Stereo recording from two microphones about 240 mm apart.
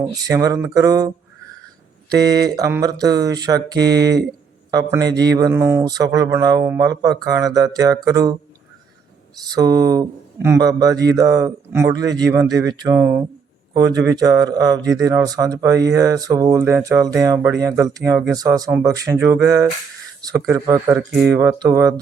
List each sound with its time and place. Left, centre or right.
0.0 s mantra: centre
9.5 s mantra: centre
21.1 s speech: centre
21.3 s mantra: centre